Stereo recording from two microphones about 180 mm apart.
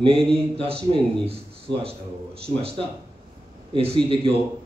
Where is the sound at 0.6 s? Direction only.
30° right (ahead or behind).